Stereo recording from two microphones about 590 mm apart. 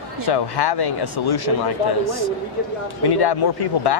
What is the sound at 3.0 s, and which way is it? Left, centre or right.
Speech, left.